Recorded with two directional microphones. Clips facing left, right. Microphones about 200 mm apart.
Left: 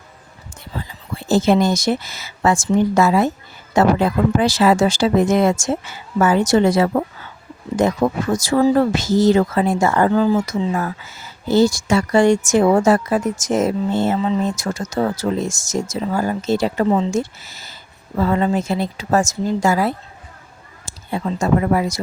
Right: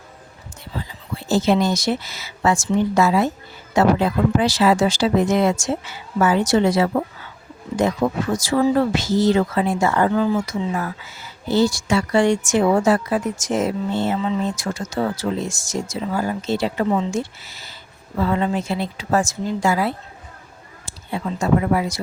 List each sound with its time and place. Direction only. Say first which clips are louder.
1.3 s speech: left 3 dB; 50° left (ahead or behind)